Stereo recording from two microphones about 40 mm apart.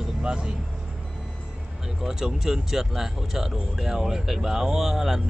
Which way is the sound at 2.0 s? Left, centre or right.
Centre.